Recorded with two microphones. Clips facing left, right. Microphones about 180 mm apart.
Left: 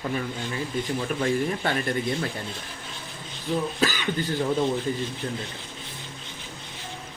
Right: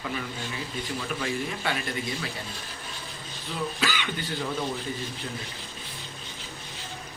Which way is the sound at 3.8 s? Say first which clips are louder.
Left 4 dB; 40° left (ahead or behind).